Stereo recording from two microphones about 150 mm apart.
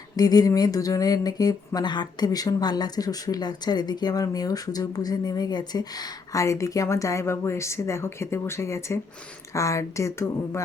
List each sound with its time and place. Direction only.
0.2 s speech: 25° left (ahead or behind)